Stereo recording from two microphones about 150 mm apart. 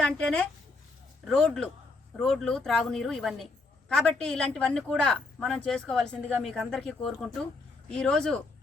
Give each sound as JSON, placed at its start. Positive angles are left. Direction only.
{"t": 0.0, "sound": "speech", "side_deg": 5}